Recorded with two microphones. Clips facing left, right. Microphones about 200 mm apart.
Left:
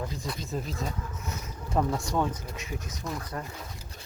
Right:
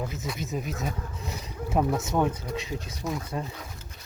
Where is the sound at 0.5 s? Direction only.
5° right (ahead or behind).